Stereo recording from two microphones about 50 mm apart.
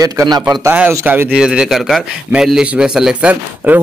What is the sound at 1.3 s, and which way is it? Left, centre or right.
Speech, centre.